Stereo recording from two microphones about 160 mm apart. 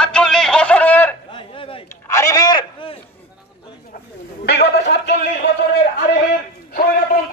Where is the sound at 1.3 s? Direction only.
35° left (ahead or behind).